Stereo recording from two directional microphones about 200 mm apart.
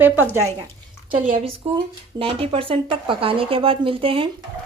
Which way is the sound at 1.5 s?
25° right (ahead or behind).